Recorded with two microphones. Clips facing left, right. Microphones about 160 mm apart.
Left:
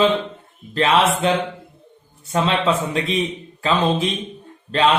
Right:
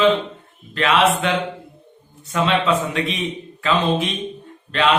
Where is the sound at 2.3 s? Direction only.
35° left (ahead or behind).